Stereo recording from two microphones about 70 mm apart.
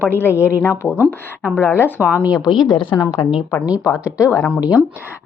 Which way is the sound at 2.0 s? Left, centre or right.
Right.